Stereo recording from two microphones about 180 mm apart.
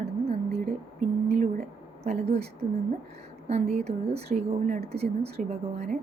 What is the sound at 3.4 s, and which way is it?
Speech, 35° right (ahead or behind).